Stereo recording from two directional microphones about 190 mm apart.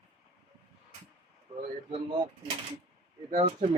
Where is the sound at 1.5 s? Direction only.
25° right (ahead or behind).